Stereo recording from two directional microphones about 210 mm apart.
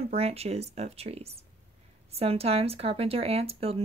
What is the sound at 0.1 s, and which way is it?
Speech, 30° right (ahead or behind).